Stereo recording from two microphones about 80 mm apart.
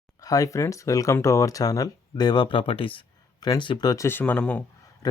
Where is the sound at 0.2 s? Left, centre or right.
Left.